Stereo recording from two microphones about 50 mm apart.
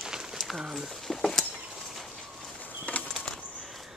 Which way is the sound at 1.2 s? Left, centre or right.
Centre.